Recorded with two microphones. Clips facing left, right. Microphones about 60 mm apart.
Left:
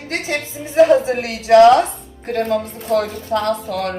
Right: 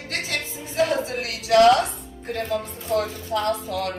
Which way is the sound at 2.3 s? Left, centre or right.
Left.